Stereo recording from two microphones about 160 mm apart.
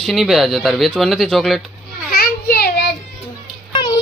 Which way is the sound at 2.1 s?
75° left (ahead or behind).